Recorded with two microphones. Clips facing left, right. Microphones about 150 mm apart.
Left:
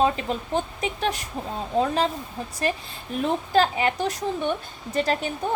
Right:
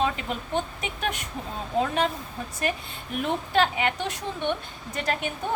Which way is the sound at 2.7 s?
35° left (ahead or behind).